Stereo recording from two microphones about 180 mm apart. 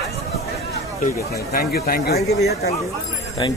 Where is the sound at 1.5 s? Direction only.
55° left (ahead or behind).